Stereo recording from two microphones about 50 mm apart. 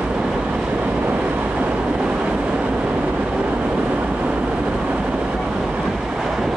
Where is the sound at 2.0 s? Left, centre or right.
Right.